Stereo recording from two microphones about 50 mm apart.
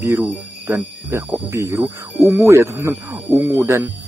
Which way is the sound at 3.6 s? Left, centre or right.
Right.